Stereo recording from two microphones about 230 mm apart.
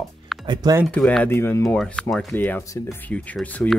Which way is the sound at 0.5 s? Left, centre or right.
Centre.